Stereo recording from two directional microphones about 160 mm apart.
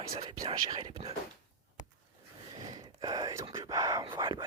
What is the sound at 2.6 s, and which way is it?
Whispering, 25° right (ahead or behind).